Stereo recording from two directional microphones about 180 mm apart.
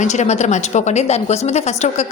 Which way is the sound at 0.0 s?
40° left (ahead or behind).